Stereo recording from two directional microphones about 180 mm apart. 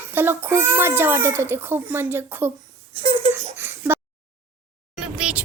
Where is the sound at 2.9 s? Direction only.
30° right (ahead or behind).